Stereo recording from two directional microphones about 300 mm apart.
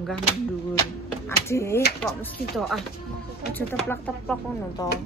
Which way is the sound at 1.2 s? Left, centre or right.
Centre.